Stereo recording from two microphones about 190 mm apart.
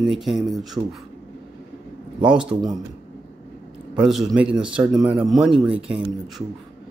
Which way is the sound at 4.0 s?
Centre (ahead or behind).